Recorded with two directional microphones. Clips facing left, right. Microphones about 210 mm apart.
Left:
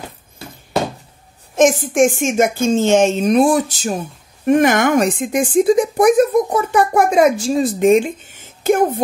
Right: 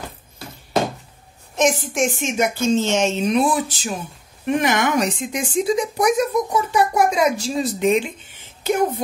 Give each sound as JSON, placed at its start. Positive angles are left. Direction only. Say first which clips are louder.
{"t": 1.5, "sound": "speech", "louder": "left 6 dB", "side_deg": 50}